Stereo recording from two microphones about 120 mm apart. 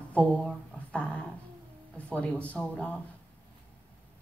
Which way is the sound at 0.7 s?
10° left (ahead or behind).